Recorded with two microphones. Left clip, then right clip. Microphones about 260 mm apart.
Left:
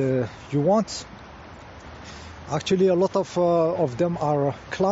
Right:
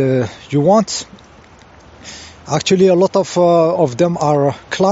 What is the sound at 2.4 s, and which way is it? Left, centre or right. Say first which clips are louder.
Speech: right 9 dB; right.